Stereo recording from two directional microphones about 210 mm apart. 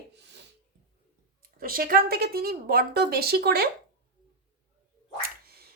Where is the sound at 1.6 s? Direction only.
45° right (ahead or behind).